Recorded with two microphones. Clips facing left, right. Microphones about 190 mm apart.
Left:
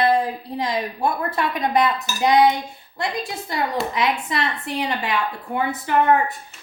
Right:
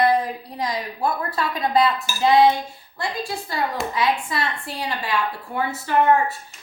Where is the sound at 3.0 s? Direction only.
20° left (ahead or behind).